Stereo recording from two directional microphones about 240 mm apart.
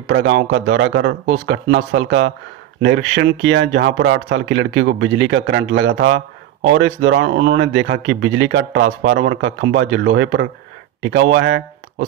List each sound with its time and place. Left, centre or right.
0.1 s speech: right